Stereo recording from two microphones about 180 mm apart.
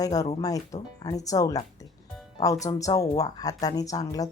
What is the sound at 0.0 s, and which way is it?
Speech, 20° left (ahead or behind).